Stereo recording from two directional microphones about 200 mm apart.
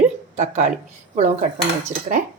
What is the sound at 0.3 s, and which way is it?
A woman's voice, 35° right (ahead or behind).